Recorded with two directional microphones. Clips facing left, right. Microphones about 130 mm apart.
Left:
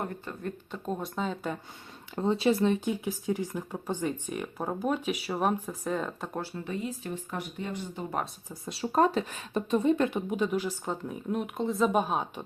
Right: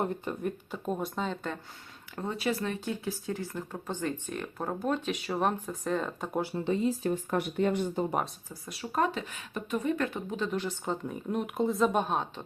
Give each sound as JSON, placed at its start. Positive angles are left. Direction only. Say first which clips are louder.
{"t": 0.0, "sound": "speech", "louder": "right 4 dB", "side_deg": -20}
{"t": 0.7, "sound": "speech", "louder": "right 1 dB", "side_deg": -5}
{"t": 2.1, "sound": "speech", "louder": "left 6 dB", "side_deg": 25}
{"t": 6.7, "sound": "speech", "louder": "right 6 dB", "side_deg": -30}
{"t": 7.3, "sound": "speech", "louder": "right 8 dB", "side_deg": -60}
{"t": 8.4, "sound": "speech", "louder": "left 5 dB", "side_deg": 25}